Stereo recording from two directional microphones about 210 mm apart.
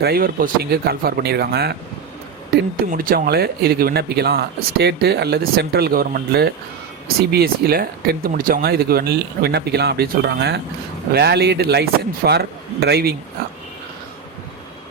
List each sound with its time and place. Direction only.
0.0 s speech: 45° right (ahead or behind)
2.9 s speech: 40° right (ahead or behind)